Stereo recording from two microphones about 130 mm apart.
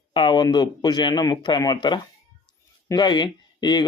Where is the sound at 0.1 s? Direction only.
40° left (ahead or behind).